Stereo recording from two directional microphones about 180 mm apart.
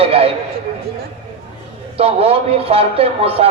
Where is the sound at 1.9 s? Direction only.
35° right (ahead or behind).